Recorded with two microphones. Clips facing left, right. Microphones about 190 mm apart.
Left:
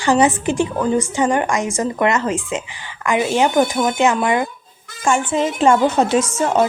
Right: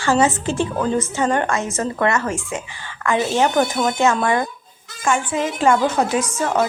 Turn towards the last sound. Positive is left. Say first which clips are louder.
# left 3 dB
turn(degrees=25)  # may be behind; listen again after turning